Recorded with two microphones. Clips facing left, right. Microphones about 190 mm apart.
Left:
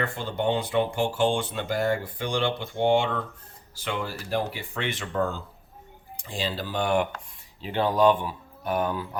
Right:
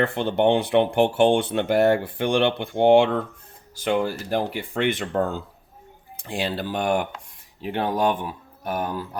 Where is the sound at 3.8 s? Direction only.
50° right (ahead or behind).